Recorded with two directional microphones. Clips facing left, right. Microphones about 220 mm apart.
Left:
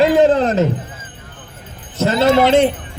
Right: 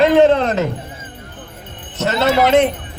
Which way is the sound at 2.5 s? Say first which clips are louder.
Left 1 dB; 30° left (ahead or behind).